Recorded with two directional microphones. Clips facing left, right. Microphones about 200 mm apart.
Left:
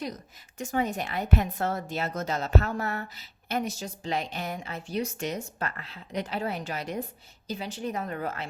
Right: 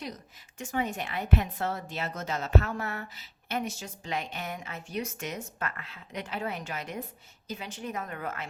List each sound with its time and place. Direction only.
0.6 s a woman's voice: 40° left (ahead or behind)